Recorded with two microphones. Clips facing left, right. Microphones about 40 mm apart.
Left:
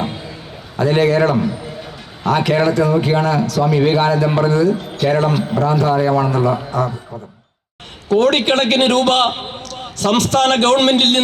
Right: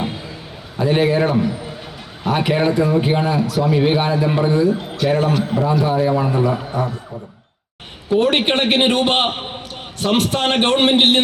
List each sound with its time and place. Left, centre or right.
0.8 s a man's voice: centre
4.8 s a man's voice: centre
8.1 s a man's voice: centre